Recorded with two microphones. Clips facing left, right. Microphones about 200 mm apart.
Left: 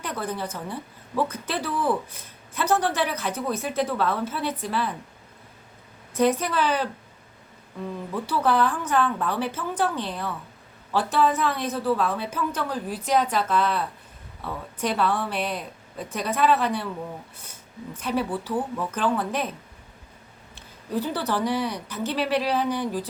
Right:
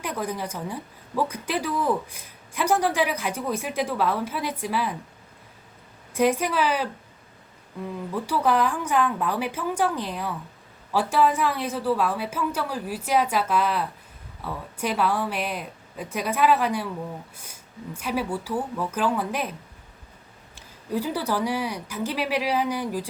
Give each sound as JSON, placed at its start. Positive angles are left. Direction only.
{"t": 0.0, "sound": "a woman's voice", "side_deg": -10}
{"t": 6.1, "sound": "a woman's voice", "side_deg": -10}
{"t": 8.1, "sound": "a woman's voice", "side_deg": -10}
{"t": 20.6, "sound": "a woman's voice", "side_deg": -10}